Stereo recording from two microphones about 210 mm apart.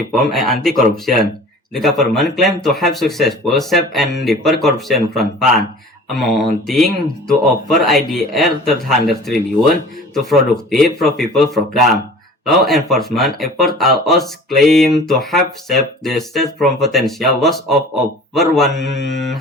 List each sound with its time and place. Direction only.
0.1 s speech: centre (ahead or behind)
18.8 s speech: 60° left (ahead or behind)
19.1 s speech: centre (ahead or behind)